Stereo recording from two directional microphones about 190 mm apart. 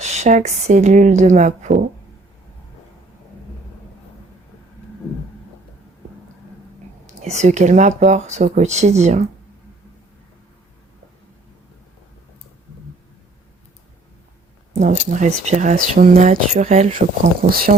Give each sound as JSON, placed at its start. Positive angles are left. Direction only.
{"t": 0.0, "sound": "speech", "side_deg": -35}
{"t": 7.1, "sound": "speech", "side_deg": -35}
{"t": 14.7, "sound": "speech", "side_deg": -40}